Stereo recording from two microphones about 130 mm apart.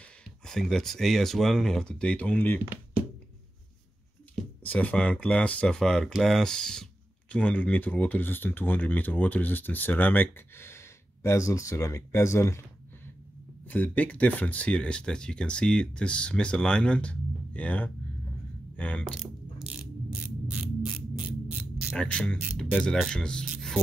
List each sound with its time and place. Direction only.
0.2 s speech: 5° left (ahead or behind)
4.6 s speech: 10° left (ahead or behind)
20.1 s a sound: 10° right (ahead or behind)
21.9 s speech: 10° left (ahead or behind)